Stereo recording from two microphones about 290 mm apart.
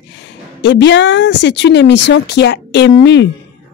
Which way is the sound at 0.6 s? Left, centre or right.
Left.